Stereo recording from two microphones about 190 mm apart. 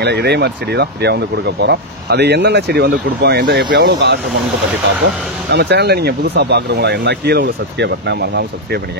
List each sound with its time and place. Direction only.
0.0 s speech: 60° right (ahead or behind)
5.5 s speech: 60° right (ahead or behind)